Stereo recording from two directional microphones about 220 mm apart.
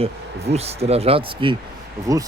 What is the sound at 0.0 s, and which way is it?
Speech, 30° right (ahead or behind).